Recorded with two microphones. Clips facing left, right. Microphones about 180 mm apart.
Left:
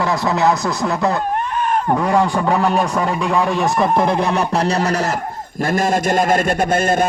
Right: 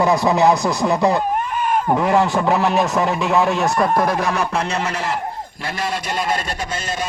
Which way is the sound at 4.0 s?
25° left (ahead or behind).